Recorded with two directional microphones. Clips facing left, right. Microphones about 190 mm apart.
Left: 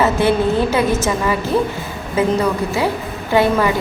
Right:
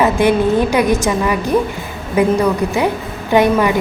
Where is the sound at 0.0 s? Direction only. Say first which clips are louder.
Right 2 dB; 15° right (ahead or behind).